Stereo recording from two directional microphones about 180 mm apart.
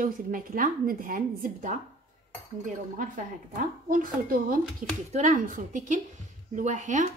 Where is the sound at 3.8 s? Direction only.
50° right (ahead or behind).